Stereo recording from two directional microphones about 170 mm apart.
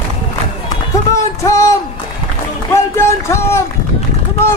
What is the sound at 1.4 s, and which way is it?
Speech, 15° left (ahead or behind).